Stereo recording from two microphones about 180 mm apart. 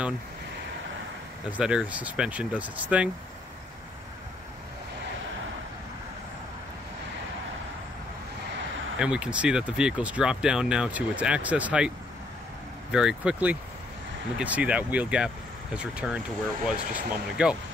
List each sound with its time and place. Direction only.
1.6 s speech: 5° right (ahead or behind)
8.9 s speech: 5° right (ahead or behind)
12.9 s speech: 5° right (ahead or behind)